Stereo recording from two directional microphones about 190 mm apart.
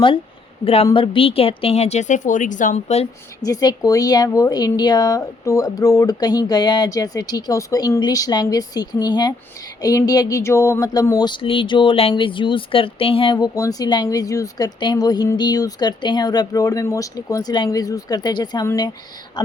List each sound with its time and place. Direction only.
0.6 s a woman's voice: 30° left (ahead or behind)
3.4 s speech: 20° left (ahead or behind)